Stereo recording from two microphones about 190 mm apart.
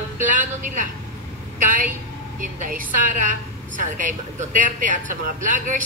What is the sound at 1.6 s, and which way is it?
Speech, 45° right (ahead or behind).